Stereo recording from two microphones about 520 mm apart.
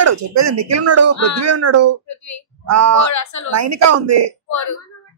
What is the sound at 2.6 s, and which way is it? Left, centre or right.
Speech, right.